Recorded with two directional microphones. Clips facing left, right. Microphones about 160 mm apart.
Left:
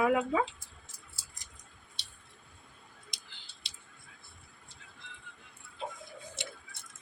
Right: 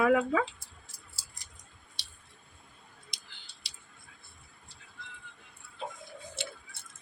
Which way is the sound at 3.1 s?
25° left (ahead or behind).